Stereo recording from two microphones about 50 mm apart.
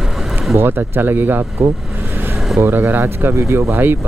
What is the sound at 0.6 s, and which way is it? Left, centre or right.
Speech, right.